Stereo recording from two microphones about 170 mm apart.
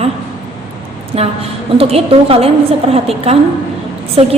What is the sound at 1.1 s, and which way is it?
A woman's voice, 35° right (ahead or behind).